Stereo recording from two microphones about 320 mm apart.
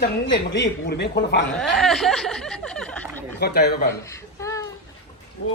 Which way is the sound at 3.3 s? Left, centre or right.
Left.